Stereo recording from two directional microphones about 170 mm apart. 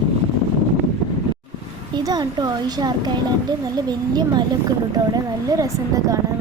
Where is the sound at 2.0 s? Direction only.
25° right (ahead or behind).